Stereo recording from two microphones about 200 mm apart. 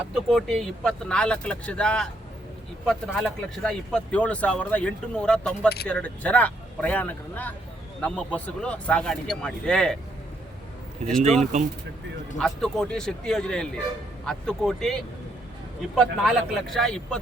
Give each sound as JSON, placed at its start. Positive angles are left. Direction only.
{"t": 0.1, "sound": "speech", "side_deg": 0}
{"t": 11.5, "sound": "speech", "side_deg": -35}
{"t": 12.4, "sound": "speech", "side_deg": 5}
{"t": 16.0, "sound": "speech", "side_deg": 0}